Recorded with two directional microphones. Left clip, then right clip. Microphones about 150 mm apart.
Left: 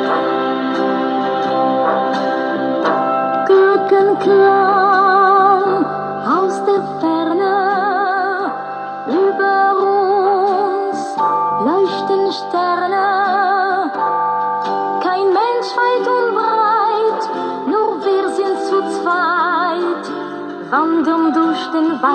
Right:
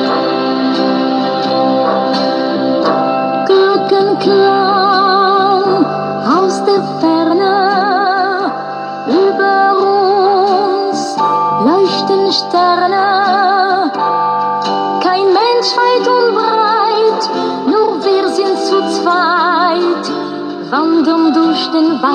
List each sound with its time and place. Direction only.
1.6 s music: 30° right (ahead or behind)
3.4 s music: 30° right (ahead or behind)
9.1 s music: 35° right (ahead or behind)
15.0 s music: 35° right (ahead or behind)
20.7 s music: 30° right (ahead or behind)